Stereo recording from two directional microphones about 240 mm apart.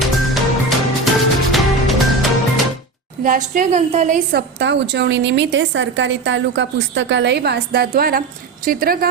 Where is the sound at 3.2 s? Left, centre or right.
Right.